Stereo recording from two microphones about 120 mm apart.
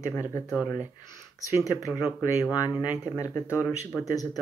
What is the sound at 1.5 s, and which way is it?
Speech, 30° left (ahead or behind).